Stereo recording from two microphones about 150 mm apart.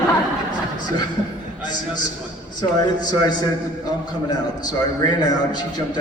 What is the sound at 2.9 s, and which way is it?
A man's voice, 25° left (ahead or behind).